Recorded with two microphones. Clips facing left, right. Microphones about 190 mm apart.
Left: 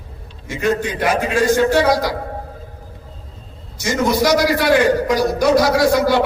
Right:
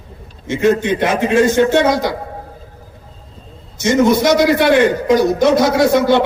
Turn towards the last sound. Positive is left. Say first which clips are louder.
# right 2 dB
turn(degrees=-25)  # may be behind; listen again after turning